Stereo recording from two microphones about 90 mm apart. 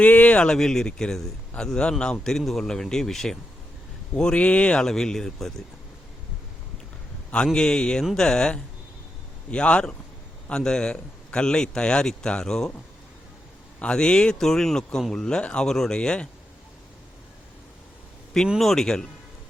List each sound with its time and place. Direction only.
0.0 s a man's voice: 15° left (ahead or behind)
7.3 s a man's voice: 10° left (ahead or behind)
13.7 s a man's voice: 10° left (ahead or behind)
18.6 s a man's voice: 5° left (ahead or behind)